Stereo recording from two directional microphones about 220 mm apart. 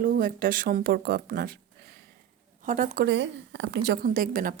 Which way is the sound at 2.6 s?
35° right (ahead or behind).